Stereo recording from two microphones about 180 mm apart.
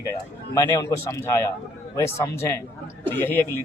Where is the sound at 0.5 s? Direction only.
20° left (ahead or behind).